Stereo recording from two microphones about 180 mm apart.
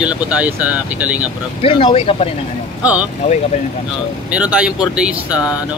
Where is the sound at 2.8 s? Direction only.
5° right (ahead or behind).